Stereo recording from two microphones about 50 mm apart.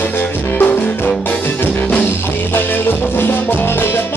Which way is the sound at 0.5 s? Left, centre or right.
Left.